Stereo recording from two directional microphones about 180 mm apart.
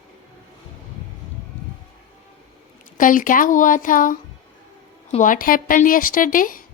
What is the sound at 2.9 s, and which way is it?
A woman's voice, 50° left (ahead or behind).